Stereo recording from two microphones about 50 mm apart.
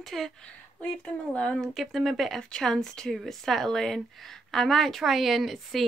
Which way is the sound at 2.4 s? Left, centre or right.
Centre.